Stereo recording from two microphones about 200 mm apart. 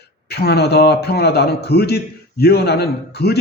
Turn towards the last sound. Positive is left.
turn(degrees=55)  # may be behind; listen again after turning